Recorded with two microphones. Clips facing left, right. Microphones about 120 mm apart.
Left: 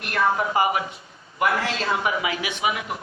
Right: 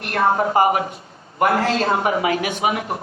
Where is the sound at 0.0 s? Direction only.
40° right (ahead or behind).